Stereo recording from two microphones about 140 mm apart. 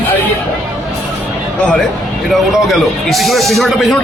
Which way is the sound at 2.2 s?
Centre (ahead or behind).